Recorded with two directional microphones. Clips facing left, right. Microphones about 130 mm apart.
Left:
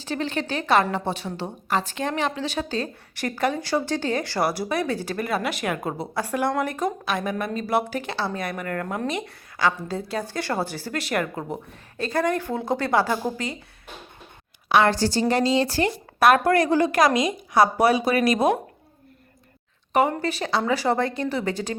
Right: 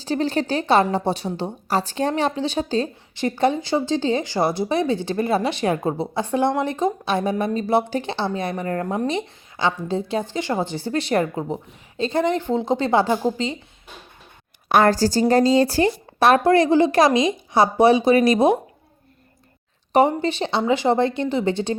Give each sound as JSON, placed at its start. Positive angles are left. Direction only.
{"t": 0.0, "sound": "a woman's voice", "side_deg": -35}
{"t": 14.7, "sound": "a woman's voice", "side_deg": -45}
{"t": 15.7, "sound": "a woman's voice", "side_deg": -30}
{"t": 19.9, "sound": "a woman's voice", "side_deg": -30}